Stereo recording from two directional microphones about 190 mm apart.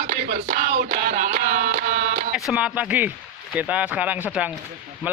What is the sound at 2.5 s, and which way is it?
Speech, 5° right (ahead or behind).